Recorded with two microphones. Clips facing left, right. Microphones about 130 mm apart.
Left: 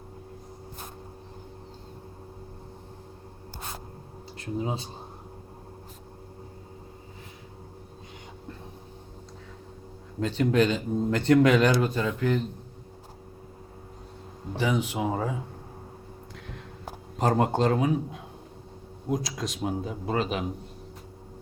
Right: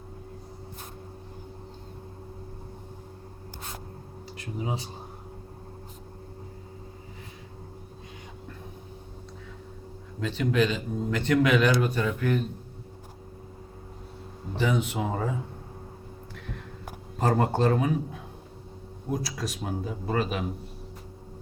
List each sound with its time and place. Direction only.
10.2 s speech: 40° left (ahead or behind); by 12.5 s 20° left (ahead or behind)
14.5 s a man's voice: 15° left (ahead or behind)
17.2 s a man's voice: 20° left (ahead or behind)